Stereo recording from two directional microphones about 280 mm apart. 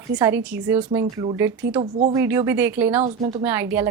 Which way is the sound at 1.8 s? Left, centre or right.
Right.